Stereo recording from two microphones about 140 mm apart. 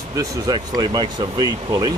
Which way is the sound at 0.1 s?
25° right (ahead or behind).